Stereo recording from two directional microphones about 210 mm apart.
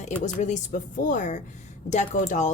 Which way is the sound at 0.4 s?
35° left (ahead or behind).